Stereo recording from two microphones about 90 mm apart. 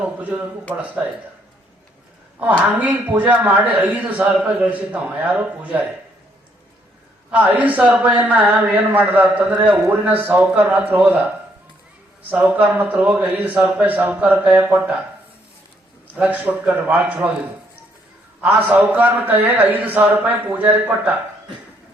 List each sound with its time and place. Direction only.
0.0 s a woman's voice: 15° right (ahead or behind)
2.4 s a woman's voice: 15° right (ahead or behind)
7.3 s a woman's voice: 15° right (ahead or behind)
12.3 s a woman's voice: 15° right (ahead or behind)
16.1 s a woman's voice: 20° right (ahead or behind)
18.6 s a man's voice: 20° right (ahead or behind)